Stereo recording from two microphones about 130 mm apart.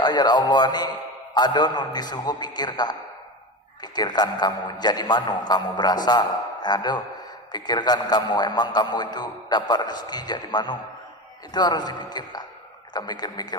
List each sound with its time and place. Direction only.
0.0 s a man's voice: 30° left (ahead or behind)
3.9 s a man's voice: 30° left (ahead or behind)